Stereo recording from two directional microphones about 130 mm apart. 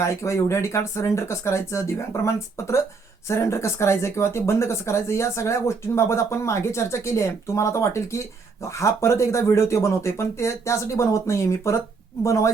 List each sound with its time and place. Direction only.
0.0 s speech: 20° left (ahead or behind)